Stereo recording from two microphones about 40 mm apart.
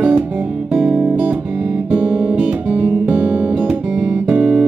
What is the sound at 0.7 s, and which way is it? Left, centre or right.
Music, centre.